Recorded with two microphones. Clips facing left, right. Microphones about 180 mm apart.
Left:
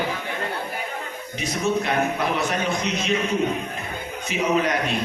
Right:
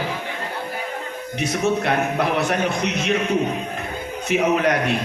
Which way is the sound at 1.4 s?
60° right (ahead or behind).